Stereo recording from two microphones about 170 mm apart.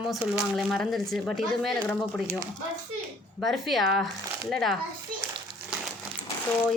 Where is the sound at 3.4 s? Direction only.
Centre (ahead or behind).